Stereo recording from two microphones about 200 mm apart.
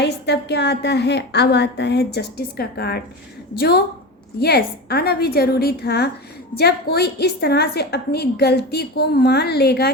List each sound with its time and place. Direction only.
0.0 s a woman's voice: 55° left (ahead or behind)